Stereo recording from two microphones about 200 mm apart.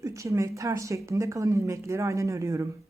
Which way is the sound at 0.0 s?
15° right (ahead or behind).